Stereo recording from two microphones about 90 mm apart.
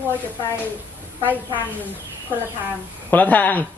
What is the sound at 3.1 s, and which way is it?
Speech, 20° left (ahead or behind).